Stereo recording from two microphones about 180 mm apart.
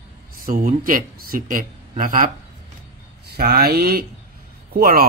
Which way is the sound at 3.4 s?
55° right (ahead or behind).